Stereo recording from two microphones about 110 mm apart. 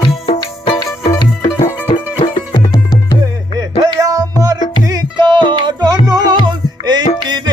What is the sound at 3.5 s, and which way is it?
Music, 35° right (ahead or behind).